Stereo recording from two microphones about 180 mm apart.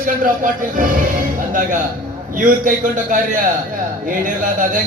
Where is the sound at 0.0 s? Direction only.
50° right (ahead or behind).